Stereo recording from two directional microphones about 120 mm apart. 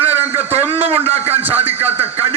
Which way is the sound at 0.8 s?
55° right (ahead or behind).